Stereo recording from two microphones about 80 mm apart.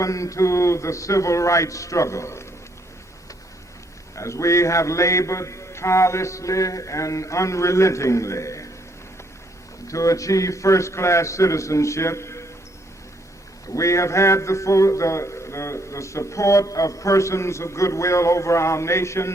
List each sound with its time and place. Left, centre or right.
0.0 s a man's voice: left
4.1 s a man's voice: left
9.8 s a man's voice: left
13.7 s a man's voice: left